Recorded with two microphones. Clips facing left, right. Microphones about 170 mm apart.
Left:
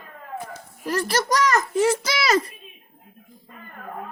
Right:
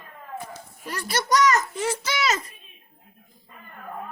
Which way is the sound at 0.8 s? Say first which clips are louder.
Left 6 dB; 40° left (ahead or behind).